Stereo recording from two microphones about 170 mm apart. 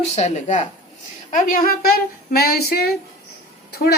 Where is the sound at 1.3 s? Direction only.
55° left (ahead or behind).